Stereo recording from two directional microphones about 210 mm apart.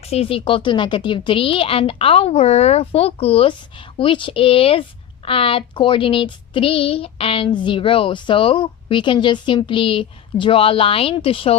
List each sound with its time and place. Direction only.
0.1 s a woman's voice: 25° left (ahead or behind)